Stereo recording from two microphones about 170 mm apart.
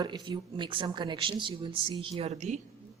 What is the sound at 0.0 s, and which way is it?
Speech, 25° right (ahead or behind).